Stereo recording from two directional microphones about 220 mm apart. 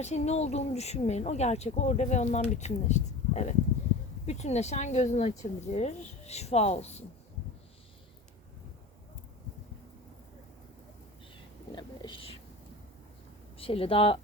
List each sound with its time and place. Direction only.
0.0 s speech: 30° left (ahead or behind)
11.7 s whispering: 20° left (ahead or behind)
13.6 s speech: 25° left (ahead or behind)